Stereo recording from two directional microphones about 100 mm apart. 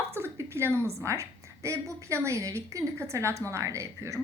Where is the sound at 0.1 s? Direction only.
25° right (ahead or behind).